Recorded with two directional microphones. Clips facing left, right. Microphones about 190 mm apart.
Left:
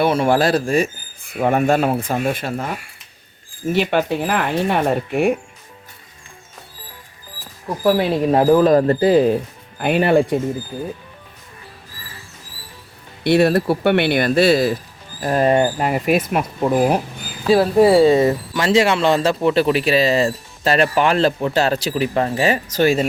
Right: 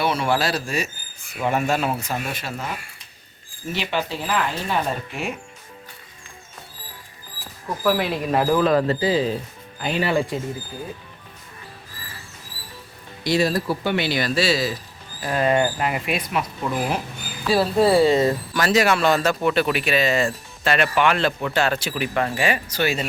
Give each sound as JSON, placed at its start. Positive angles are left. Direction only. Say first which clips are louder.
{"t": 0.0, "sound": "speech", "louder": "left 6 dB", "side_deg": 50}
{"t": 3.7, "sound": "speech", "louder": "left 8 dB", "side_deg": 50}
{"t": 7.9, "sound": "speech", "louder": "left 6 dB", "side_deg": 35}
{"t": 13.2, "sound": "speech", "louder": "left 6 dB", "side_deg": 60}
{"t": 15.2, "sound": "speech", "louder": "left 4 dB", "side_deg": 40}
{"t": 17.4, "sound": "speech", "louder": "left 5 dB", "side_deg": 20}